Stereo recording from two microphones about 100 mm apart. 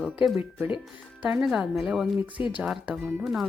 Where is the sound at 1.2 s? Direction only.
10° right (ahead or behind).